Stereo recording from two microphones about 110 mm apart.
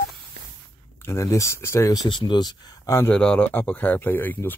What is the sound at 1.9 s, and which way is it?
Speech, 40° left (ahead or behind).